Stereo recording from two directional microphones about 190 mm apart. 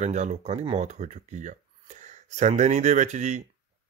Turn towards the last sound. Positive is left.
turn(degrees=-40)  # may be behind; listen again after turning